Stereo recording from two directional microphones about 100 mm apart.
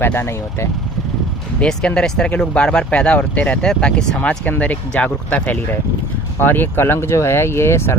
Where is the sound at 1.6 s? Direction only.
10° left (ahead or behind).